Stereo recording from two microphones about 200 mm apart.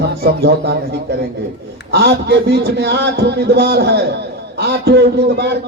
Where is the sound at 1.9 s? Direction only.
55° right (ahead or behind).